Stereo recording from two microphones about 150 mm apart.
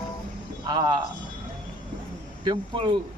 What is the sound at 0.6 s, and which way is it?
Speech, 30° right (ahead or behind).